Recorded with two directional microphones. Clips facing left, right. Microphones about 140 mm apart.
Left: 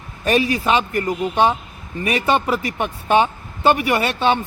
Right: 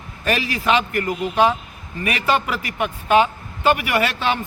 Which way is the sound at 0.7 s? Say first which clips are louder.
Right 2 dB; 30° left (ahead or behind).